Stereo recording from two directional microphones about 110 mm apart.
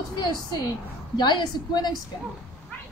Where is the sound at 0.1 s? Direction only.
40° left (ahead or behind).